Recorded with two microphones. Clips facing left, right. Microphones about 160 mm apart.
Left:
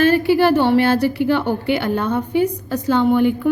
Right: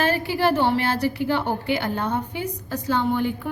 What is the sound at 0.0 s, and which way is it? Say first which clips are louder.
A woman's voice: left 8 dB; 65° left (ahead or behind).